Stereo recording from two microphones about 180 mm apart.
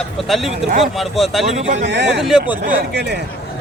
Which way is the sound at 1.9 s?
75° right (ahead or behind).